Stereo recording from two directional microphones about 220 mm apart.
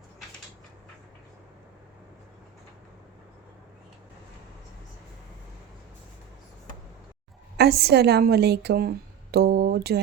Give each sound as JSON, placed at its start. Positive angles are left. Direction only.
{"t": 7.5, "sound": "a woman's voice", "side_deg": -45}